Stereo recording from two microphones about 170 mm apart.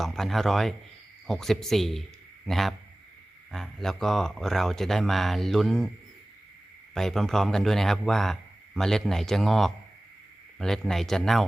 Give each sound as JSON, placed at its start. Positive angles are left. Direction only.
{"t": 0.0, "sound": "a man's voice", "side_deg": 0}
{"t": 6.9, "sound": "a man's voice", "side_deg": 0}